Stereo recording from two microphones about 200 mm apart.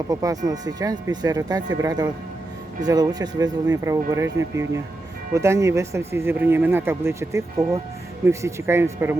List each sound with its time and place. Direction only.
0.1 s speech: 15° right (ahead or behind)